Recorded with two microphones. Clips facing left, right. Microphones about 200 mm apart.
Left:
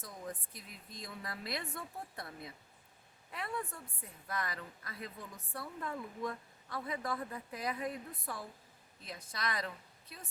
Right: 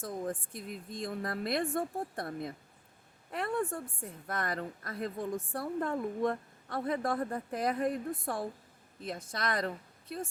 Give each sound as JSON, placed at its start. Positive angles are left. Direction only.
{"t": 0.0, "sound": "speech", "side_deg": -50}